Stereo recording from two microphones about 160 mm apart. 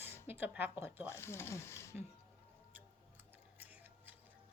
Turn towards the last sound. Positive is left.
turn(degrees=-10)  # may be behind; listen again after turning